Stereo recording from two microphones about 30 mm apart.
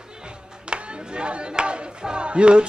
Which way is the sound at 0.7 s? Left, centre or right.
Right.